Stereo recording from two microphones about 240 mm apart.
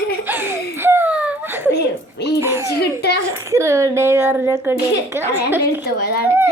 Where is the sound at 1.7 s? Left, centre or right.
Left.